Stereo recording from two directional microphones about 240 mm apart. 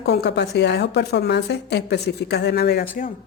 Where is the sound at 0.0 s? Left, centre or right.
Left.